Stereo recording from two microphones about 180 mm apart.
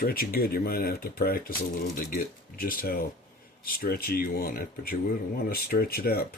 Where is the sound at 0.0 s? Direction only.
55° left (ahead or behind).